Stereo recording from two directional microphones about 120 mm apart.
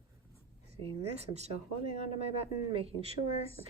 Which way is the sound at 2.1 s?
55° right (ahead or behind).